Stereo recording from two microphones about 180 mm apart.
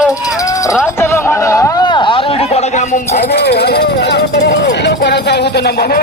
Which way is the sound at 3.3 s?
65° left (ahead or behind).